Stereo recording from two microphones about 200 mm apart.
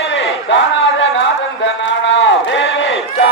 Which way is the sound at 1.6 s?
65° left (ahead or behind).